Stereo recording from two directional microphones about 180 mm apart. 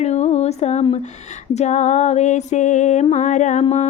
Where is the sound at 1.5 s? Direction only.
40° left (ahead or behind).